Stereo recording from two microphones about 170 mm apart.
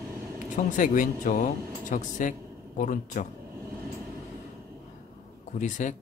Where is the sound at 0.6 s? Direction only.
50° left (ahead or behind).